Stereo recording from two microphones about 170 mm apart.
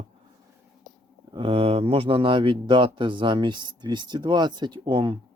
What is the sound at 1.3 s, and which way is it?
Speech, 30° right (ahead or behind).